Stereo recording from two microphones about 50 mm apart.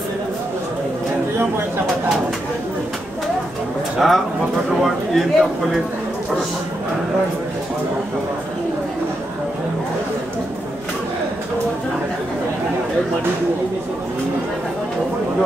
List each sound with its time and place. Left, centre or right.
4.0 s speech: centre